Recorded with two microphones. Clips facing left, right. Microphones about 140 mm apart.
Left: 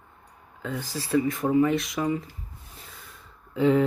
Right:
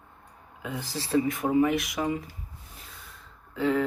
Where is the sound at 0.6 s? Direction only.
15° right (ahead or behind).